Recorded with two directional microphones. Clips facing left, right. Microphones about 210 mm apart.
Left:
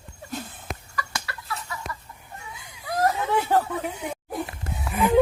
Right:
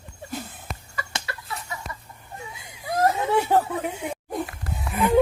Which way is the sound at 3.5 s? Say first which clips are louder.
Right 1 dB; 10° right (ahead or behind).